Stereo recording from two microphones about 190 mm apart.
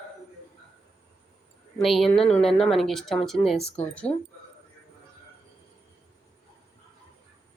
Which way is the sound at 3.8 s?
40° left (ahead or behind).